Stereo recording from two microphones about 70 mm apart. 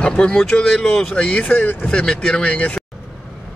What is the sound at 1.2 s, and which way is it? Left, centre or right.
Speech, left.